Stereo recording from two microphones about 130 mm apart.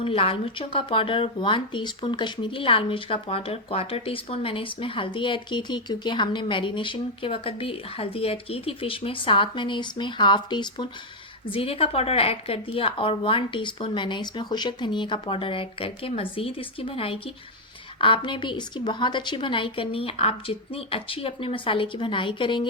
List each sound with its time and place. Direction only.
0.0 s a woman's voice: 45° left (ahead or behind)